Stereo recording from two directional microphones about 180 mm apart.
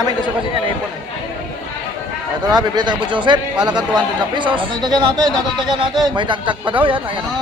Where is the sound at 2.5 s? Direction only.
25° right (ahead or behind).